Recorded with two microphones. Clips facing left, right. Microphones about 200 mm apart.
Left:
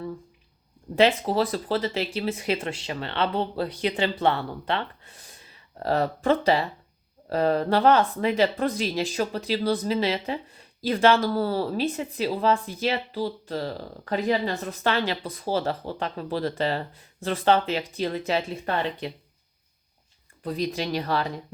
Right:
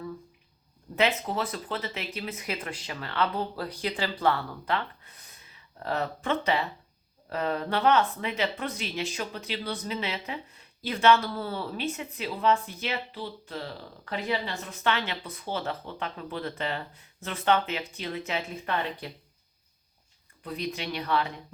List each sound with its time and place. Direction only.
0.9 s speech: 35° left (ahead or behind)
20.4 s speech: 35° left (ahead or behind)